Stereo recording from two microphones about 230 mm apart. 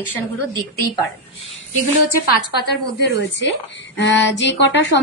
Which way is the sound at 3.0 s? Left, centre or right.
Left.